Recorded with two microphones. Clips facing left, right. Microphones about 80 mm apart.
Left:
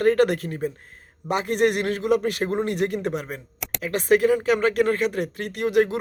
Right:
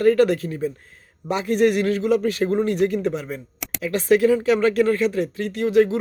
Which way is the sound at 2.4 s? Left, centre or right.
Left.